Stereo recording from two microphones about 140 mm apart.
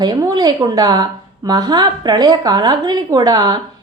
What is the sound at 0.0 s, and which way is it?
A woman's voice, 30° right (ahead or behind).